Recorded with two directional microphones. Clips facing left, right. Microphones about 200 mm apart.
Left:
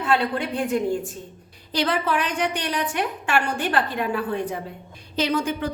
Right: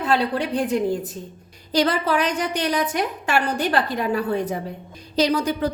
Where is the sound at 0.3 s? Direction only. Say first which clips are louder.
Right 2 dB; 35° right (ahead or behind).